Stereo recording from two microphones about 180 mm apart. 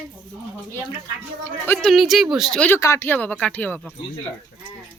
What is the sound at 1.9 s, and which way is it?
Speech, centre (ahead or behind).